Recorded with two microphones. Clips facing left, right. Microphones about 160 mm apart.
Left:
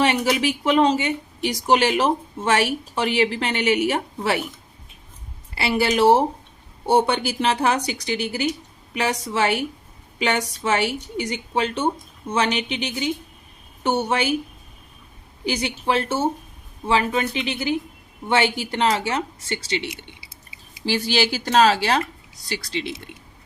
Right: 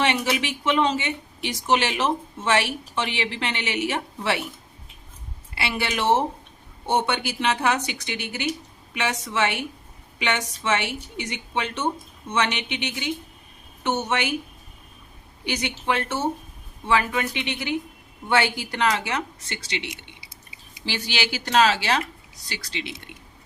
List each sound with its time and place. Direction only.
0.0 s speech: 35° left (ahead or behind)
5.5 s speech: 35° left (ahead or behind)
15.4 s a woman's voice: 30° left (ahead or behind)